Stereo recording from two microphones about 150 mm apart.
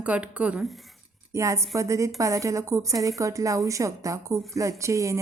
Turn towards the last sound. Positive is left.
turn(degrees=-20)  # may be behind; listen again after turning